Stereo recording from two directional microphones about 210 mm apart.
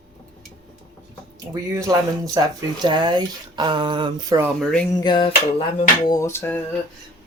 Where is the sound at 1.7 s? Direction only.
15° right (ahead or behind).